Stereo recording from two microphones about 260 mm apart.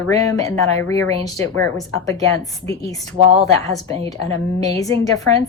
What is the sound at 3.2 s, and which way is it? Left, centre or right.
Speech, right.